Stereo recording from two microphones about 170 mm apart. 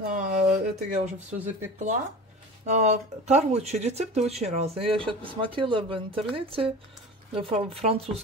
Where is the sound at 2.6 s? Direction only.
40° right (ahead or behind).